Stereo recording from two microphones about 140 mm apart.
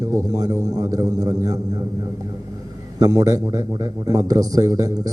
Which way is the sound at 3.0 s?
25° right (ahead or behind).